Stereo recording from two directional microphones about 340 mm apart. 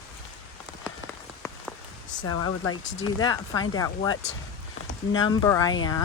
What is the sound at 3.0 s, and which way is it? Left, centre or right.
Speech, centre.